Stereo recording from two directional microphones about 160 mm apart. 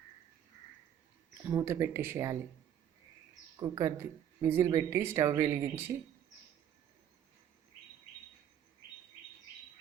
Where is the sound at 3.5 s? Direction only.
25° right (ahead or behind).